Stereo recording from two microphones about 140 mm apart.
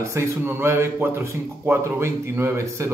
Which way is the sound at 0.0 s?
20° right (ahead or behind).